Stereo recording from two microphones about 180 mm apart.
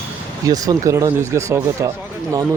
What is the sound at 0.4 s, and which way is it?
Speech, 20° right (ahead or behind).